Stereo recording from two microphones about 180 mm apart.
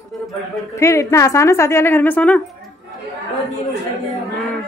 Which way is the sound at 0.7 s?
15° left (ahead or behind).